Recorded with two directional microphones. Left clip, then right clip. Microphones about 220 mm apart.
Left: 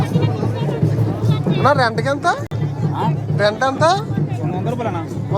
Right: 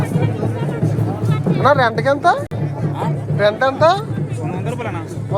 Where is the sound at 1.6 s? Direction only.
10° left (ahead or behind).